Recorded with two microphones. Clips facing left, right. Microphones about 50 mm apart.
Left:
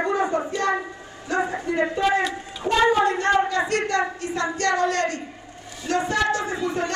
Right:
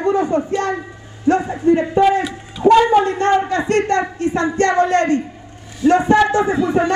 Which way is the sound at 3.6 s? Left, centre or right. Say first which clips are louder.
Right 3 dB; right.